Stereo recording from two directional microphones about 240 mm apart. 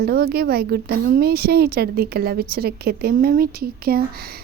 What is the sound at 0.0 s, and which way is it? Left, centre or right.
A child's voice, right.